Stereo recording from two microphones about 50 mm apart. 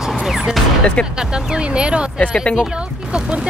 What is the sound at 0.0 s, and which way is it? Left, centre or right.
Music, centre.